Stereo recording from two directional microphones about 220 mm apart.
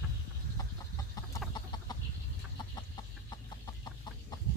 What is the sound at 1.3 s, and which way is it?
Chicken, 20° left (ahead or behind).